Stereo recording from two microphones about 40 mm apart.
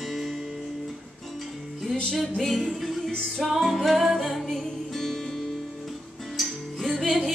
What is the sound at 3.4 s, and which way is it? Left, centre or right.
Music, centre.